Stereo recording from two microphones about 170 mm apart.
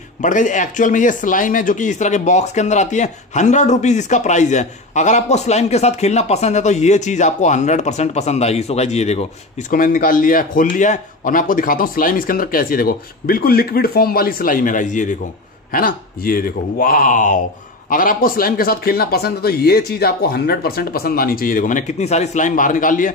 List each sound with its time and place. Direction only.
0.2 s speech: 50° left (ahead or behind)
9.7 s a man's voice: 55° left (ahead or behind)
15.7 s a man's voice: 60° left (ahead or behind)